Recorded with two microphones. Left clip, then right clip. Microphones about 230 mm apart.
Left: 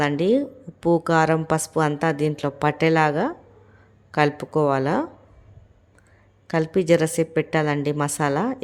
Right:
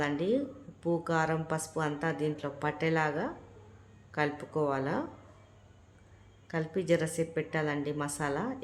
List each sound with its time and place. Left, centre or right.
0.0 s a woman's voice: left
6.5 s a woman's voice: left